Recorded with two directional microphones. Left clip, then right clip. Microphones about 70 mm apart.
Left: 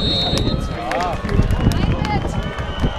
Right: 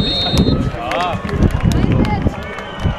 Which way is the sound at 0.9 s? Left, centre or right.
Centre.